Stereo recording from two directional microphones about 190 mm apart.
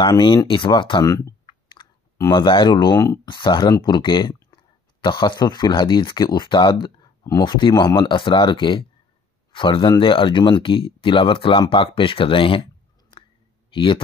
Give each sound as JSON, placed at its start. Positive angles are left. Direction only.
{"t": 0.0, "sound": "speech", "side_deg": 25}
{"t": 13.7, "sound": "speech", "side_deg": 25}